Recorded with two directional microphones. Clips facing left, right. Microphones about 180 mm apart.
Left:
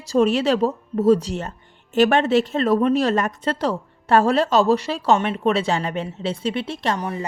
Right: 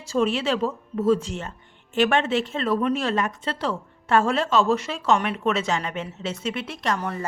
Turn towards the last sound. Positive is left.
turn(degrees=15)  # may be behind; listen again after turning